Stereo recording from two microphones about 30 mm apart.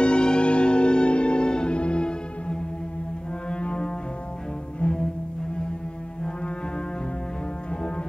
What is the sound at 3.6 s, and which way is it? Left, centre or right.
Music, left.